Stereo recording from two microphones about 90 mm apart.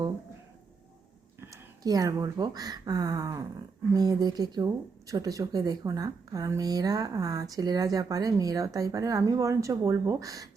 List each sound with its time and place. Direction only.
1.4 s speech: 40° right (ahead or behind)